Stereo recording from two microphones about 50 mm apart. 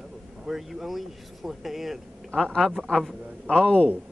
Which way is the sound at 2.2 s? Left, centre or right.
Centre.